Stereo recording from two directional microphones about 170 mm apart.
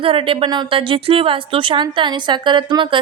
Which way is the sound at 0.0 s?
30° right (ahead or behind).